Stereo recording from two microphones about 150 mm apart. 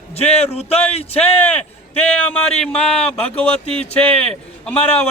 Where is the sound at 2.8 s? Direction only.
40° left (ahead or behind).